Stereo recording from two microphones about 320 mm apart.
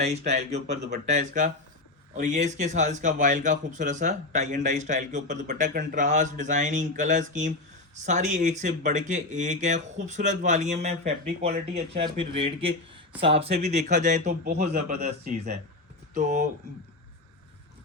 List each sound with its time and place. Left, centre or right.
0.0 s speech: right